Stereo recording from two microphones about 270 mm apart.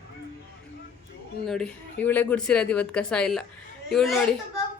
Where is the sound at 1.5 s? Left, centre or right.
Centre.